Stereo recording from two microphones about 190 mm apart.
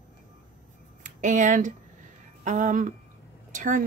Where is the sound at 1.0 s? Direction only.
40° right (ahead or behind).